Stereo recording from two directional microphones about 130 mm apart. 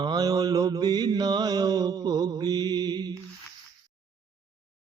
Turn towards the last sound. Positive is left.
turn(degrees=-30)  # may be behind; listen again after turning